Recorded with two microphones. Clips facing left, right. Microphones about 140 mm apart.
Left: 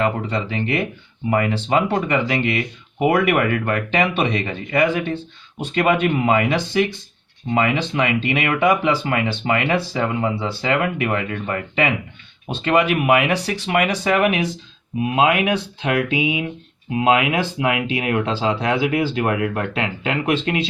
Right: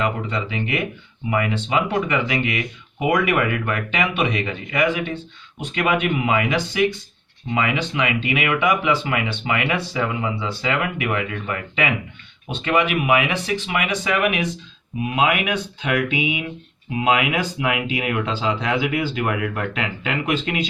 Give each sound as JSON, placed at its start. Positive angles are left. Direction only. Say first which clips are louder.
{"t": 0.0, "sound": "speech", "louder": "left 3 dB", "side_deg": 35}